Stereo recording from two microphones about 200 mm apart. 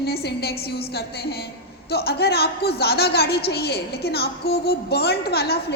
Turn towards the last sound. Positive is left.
turn(degrees=50)  # may be behind; listen again after turning